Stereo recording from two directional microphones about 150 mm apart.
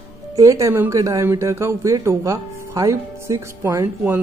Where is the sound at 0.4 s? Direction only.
20° right (ahead or behind).